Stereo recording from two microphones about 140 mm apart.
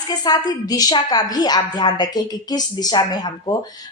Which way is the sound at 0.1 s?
30° left (ahead or behind).